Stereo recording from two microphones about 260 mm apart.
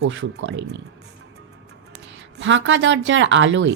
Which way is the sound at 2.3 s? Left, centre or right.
Right.